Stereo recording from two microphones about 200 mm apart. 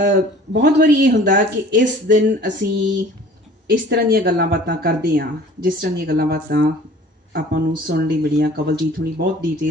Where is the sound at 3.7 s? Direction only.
50° right (ahead or behind).